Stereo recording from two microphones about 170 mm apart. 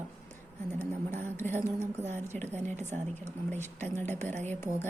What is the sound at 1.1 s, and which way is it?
Speech, 45° right (ahead or behind).